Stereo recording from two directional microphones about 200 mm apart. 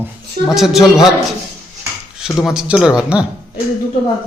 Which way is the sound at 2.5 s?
5° right (ahead or behind).